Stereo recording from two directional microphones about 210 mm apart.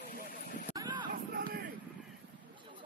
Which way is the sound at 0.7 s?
20° right (ahead or behind).